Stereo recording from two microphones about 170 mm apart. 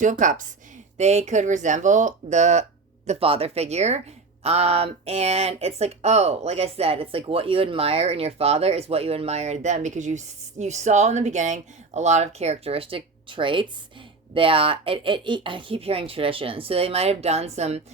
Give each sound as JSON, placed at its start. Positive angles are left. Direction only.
{"t": 0.0, "sound": "speech", "side_deg": -50}